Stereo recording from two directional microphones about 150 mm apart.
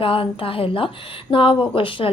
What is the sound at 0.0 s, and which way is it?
A woman's voice, 35° left (ahead or behind).